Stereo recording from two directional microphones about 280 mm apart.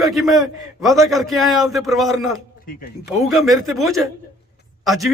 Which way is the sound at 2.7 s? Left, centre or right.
Left.